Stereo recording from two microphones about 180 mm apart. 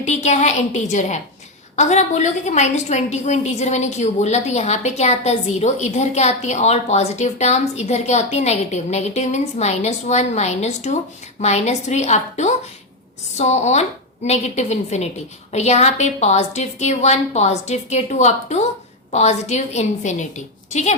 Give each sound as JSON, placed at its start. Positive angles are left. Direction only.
{"t": 0.0, "sound": "a woman's voice", "side_deg": 40}